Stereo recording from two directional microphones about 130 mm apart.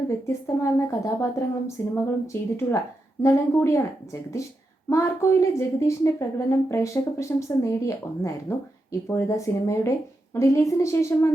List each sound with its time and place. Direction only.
0.1 s a woman's voice: 20° left (ahead or behind)